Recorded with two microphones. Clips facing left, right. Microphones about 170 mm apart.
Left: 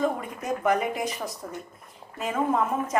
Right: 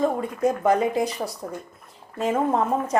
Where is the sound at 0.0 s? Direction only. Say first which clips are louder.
Right 6 dB; 30° right (ahead or behind).